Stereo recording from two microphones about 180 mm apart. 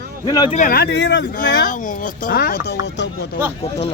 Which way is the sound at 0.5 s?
50° left (ahead or behind).